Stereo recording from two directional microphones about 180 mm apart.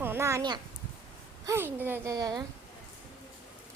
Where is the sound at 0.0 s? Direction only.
15° right (ahead or behind).